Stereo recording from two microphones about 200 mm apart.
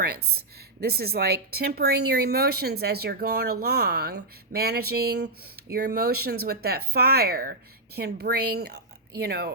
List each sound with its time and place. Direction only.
0.0 s speech: 50° right (ahead or behind)